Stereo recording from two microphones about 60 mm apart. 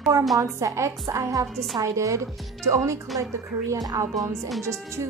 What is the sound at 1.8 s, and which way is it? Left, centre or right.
A woman's voice, right.